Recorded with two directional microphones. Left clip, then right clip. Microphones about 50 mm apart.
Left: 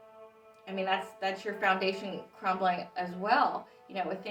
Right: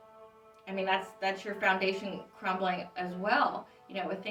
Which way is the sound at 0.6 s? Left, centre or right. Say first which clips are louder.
Even; right.